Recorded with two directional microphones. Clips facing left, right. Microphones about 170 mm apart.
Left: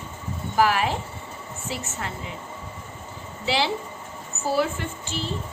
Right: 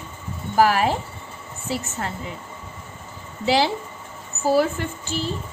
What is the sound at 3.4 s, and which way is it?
Speech, 40° right (ahead or behind).